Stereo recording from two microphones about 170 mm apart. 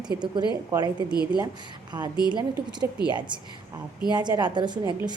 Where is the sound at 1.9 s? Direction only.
25° right (ahead or behind).